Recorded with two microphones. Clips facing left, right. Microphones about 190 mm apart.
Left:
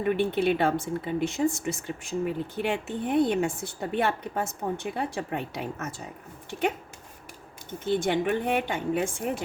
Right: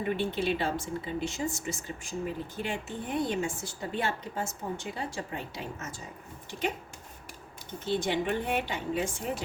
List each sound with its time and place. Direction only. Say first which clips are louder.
0.2 s a woman's voice: left 6 dB; 60° left (ahead or behind)
7.9 s a woman's voice: left 4 dB; 50° left (ahead or behind)